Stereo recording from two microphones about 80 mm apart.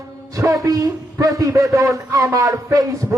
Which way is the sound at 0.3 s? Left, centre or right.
Right.